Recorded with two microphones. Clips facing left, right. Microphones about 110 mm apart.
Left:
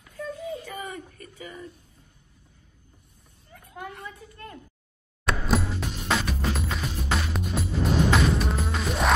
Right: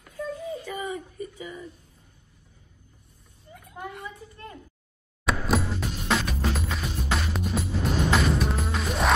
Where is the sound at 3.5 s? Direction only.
20° right (ahead or behind).